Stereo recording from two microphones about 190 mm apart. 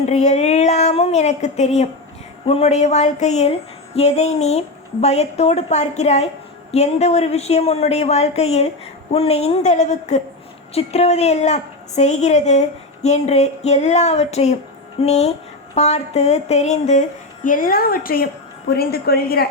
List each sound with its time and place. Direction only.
0.0 s a woman's voice: 40° left (ahead or behind); by 19.5 s 55° left (ahead or behind)